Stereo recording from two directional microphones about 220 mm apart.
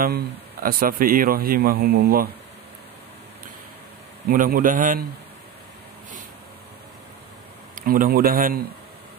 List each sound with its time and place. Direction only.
0.0 s a man's voice: 40° right (ahead or behind)
4.3 s a man's voice: 40° right (ahead or behind)
7.7 s speech: 40° right (ahead or behind)